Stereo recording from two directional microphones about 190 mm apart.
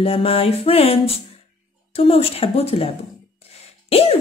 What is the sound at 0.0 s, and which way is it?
Speech, 30° left (ahead or behind).